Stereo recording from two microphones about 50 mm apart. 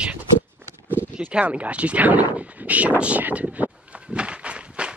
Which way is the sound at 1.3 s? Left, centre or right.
Right.